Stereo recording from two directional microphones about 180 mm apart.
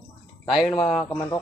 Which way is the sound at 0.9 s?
10° left (ahead or behind).